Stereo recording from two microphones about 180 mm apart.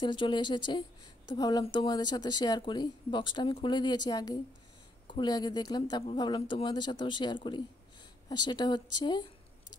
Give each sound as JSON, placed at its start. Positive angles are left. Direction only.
{"t": 0.0, "sound": "speech", "side_deg": 25}